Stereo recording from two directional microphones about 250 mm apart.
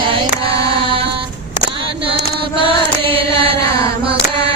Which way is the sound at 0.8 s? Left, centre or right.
Right.